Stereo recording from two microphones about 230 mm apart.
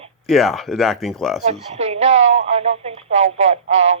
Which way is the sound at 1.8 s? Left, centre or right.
Right.